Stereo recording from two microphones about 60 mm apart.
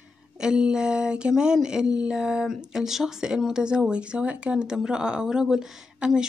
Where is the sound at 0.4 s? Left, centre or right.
Centre.